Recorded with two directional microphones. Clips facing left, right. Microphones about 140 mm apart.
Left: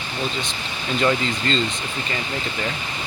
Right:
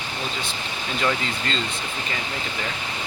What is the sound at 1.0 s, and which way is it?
Speech, 5° right (ahead or behind).